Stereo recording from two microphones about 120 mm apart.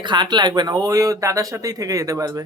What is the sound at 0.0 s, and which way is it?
Speech, 40° right (ahead or behind).